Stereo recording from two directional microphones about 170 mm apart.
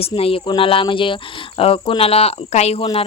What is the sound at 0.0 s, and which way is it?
Speech, 35° left (ahead or behind).